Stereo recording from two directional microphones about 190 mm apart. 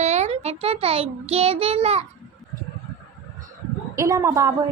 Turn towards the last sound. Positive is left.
turn(degrees=-15)  # may be behind; listen again after turning